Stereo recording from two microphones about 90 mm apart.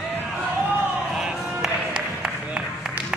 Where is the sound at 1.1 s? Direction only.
5° right (ahead or behind).